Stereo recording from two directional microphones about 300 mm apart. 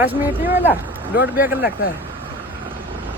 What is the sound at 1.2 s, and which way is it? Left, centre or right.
Speech, centre.